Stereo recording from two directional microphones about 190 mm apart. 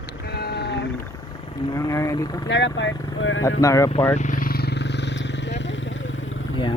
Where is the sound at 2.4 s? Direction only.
75° left (ahead or behind).